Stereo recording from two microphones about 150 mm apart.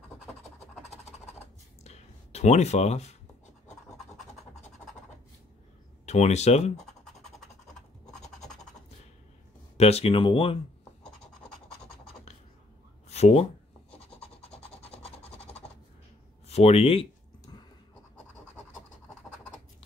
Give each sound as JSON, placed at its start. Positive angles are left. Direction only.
{"t": 1.9, "sound": "a sound", "side_deg": 45}
{"t": 6.0, "sound": "speech", "side_deg": 45}
{"t": 8.1, "sound": "scratch", "side_deg": 5}
{"t": 9.8, "sound": "speech", "side_deg": 45}
{"t": 11.4, "sound": "scratch", "side_deg": 5}
{"t": 13.1, "sound": "speech", "side_deg": 45}
{"t": 14.2, "sound": "rub", "side_deg": 40}
{"t": 15.2, "sound": "a sound", "side_deg": 10}
{"t": 16.4, "sound": "a sound", "side_deg": 45}